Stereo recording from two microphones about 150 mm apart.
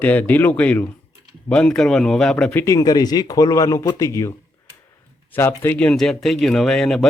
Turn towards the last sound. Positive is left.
turn(degrees=5)  # may be behind; listen again after turning